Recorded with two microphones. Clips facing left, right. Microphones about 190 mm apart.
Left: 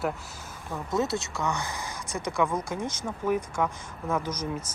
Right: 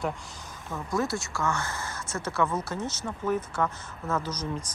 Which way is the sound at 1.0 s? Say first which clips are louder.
Left 1 dB; 20° left (ahead or behind).